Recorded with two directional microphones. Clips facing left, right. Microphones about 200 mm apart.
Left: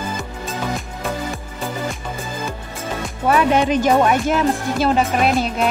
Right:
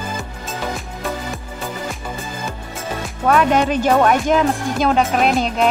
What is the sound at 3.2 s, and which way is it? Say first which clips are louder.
Speech: right 1 dB; 5° left (ahead or behind).